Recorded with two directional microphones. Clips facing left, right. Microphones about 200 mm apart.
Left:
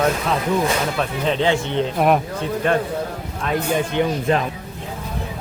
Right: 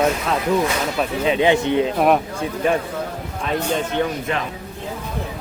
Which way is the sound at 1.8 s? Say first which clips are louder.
Right 1 dB; centre (ahead or behind).